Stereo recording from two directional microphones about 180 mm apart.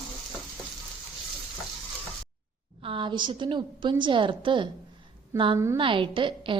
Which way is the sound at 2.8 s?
30° right (ahead or behind).